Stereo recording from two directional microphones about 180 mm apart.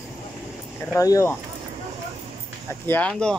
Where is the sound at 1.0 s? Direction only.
15° left (ahead or behind).